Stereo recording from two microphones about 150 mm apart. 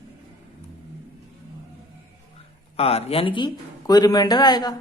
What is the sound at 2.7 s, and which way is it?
A man's voice, 40° left (ahead or behind).